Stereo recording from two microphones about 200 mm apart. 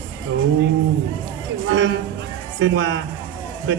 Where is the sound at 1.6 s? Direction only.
60° right (ahead or behind).